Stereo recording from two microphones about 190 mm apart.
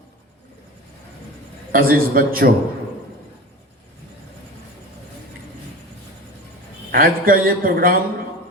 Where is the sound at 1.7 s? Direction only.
50° right (ahead or behind).